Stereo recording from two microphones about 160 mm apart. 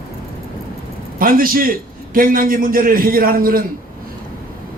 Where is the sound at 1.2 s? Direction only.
65° right (ahead or behind).